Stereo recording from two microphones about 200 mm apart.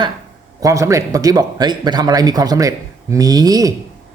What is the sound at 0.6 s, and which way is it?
A man's voice, 15° right (ahead or behind).